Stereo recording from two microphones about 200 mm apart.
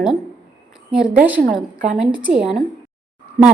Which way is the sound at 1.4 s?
40° right (ahead or behind).